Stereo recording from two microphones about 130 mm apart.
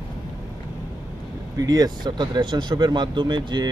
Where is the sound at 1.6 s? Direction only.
30° right (ahead or behind).